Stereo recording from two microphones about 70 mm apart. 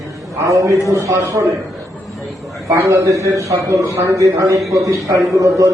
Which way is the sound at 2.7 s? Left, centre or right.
Right.